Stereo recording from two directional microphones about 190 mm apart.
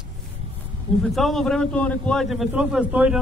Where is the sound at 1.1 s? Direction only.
Centre (ahead or behind).